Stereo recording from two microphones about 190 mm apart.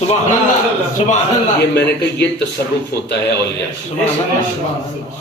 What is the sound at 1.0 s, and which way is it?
Speech, 35° left (ahead or behind).